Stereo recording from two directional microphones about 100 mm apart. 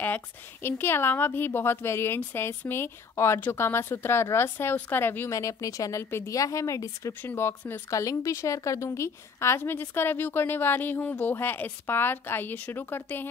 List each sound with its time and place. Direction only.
0.0 s a woman's voice: 20° left (ahead or behind)
7.9 s a woman's voice: 35° left (ahead or behind)